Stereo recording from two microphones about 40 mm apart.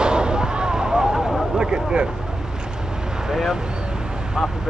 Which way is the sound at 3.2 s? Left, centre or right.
Centre.